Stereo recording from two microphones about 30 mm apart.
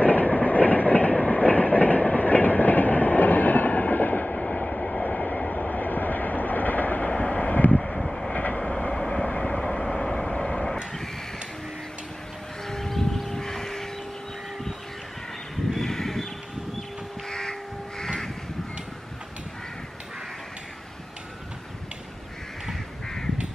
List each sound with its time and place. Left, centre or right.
0.0 s train: left
4.5 s train: left
4.7 s train: left
5.0 s train: left
5.5 s vehicle: left
7.0 s vehicle: left
8.0 s vehicle: centre
8.7 s vehicle: left
9.6 s vehicle: left
12.6 s a sound: centre
13.3 s vehicle: centre
15.8 s a sound: centre
17.3 s crow: left